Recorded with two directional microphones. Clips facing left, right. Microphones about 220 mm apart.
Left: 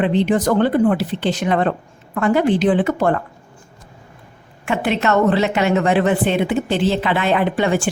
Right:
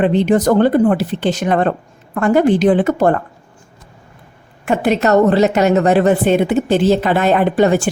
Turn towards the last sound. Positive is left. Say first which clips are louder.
# right 5 dB
turn(degrees=-40)  # may be behind; listen again after turning